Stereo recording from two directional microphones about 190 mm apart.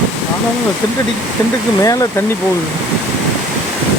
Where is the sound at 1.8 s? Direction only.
20° left (ahead or behind).